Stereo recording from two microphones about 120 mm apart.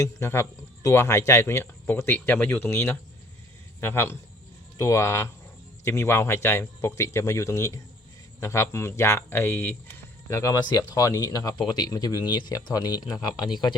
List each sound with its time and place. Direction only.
0.0 s speech: 25° left (ahead or behind)